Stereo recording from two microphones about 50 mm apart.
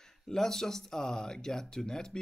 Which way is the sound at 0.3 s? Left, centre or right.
Centre.